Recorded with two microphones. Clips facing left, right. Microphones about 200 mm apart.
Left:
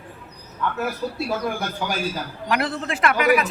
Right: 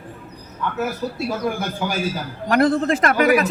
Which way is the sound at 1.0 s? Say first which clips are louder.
Right 1 dB; centre (ahead or behind).